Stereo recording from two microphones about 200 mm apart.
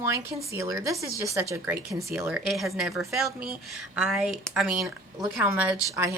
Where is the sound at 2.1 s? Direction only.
5° right (ahead or behind).